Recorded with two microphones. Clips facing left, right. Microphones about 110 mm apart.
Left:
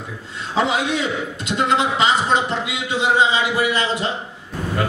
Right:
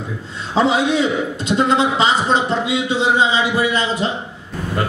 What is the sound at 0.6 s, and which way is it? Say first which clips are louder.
A man's voice: right 4 dB; 30° right (ahead or behind).